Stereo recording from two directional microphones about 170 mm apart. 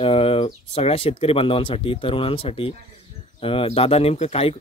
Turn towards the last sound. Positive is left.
turn(degrees=35)  # may be behind; listen again after turning